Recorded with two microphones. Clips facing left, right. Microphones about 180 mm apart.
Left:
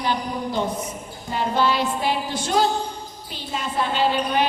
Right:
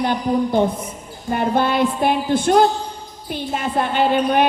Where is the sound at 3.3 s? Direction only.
55° right (ahead or behind).